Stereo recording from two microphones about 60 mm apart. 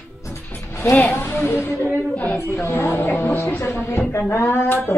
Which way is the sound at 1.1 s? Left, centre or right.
Left.